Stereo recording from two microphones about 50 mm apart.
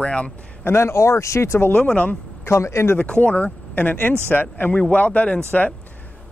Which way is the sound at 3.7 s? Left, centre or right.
Left.